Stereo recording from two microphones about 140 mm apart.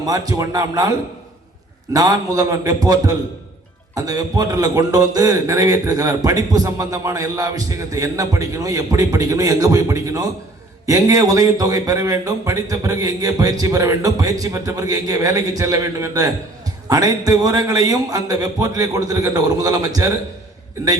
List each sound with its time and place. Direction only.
0.0 s a man's voice: 25° right (ahead or behind)